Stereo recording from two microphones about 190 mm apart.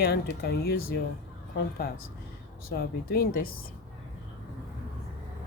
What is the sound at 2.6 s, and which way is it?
Speech, 55° left (ahead or behind).